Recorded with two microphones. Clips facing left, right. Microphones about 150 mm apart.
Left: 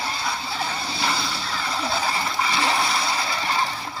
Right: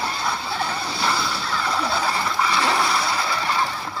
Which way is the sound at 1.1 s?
25° left (ahead or behind).